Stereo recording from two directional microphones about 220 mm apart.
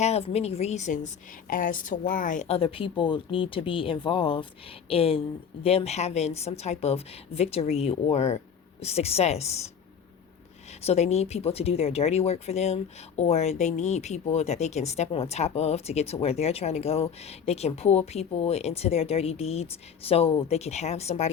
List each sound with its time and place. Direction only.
0.0 s speech: 30° left (ahead or behind)
10.8 s speech: 30° left (ahead or behind)